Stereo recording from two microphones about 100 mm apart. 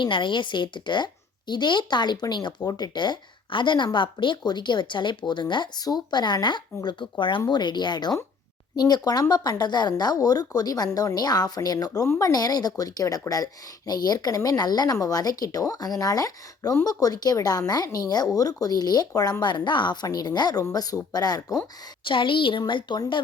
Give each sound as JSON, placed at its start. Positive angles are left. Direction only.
{"t": 0.0, "sound": "speech", "side_deg": 55}
{"t": 22.0, "sound": "a woman's voice", "side_deg": 55}